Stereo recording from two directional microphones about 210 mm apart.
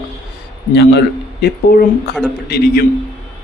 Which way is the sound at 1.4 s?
55° left (ahead or behind).